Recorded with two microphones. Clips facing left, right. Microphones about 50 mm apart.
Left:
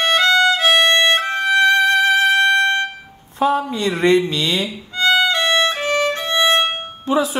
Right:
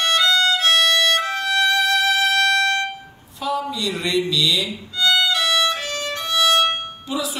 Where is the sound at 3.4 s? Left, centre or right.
Left.